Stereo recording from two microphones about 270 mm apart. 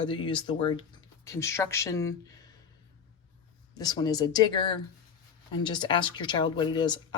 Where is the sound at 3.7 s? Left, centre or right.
Centre.